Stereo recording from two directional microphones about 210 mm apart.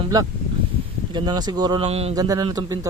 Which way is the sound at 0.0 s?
20° right (ahead or behind).